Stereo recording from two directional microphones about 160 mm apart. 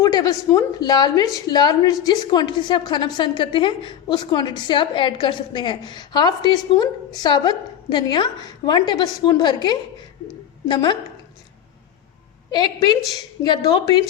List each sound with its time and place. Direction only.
0.0 s a woman's voice: 25° left (ahead or behind)
10.2 s a sound: 25° left (ahead or behind)
12.5 s a woman's voice: 25° left (ahead or behind)